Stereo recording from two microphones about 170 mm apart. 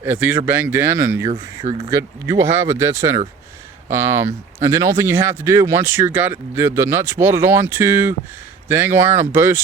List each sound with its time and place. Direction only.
0.0 s speech: 10° right (ahead or behind)
1.3 s speech: 40° right (ahead or behind)
1.9 s speech: 20° right (ahead or behind)